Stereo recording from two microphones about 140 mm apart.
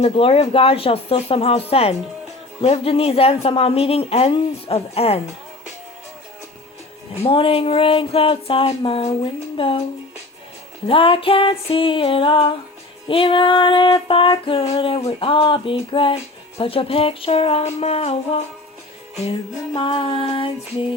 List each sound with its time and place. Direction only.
0.0 s a woman's voice: 45° left (ahead or behind)
7.3 s female singing: 40° left (ahead or behind)
10.8 s female singing: 40° left (ahead or behind)
16.6 s a woman's voice: 40° left (ahead or behind)
19.1 s female singing: 45° left (ahead or behind)